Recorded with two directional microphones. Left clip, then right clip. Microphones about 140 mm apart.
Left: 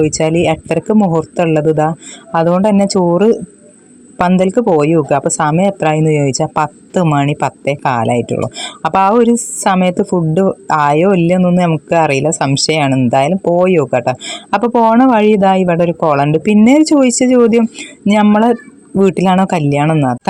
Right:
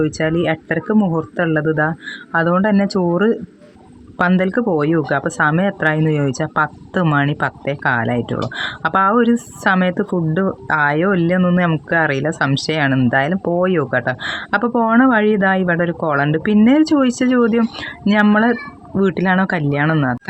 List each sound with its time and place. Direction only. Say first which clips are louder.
0.0 s speech: left 6 dB; 25° left (ahead or behind)
14.6 s speech: left 9 dB; 5° left (ahead or behind)
14.8 s speech: left 4 dB; 25° left (ahead or behind)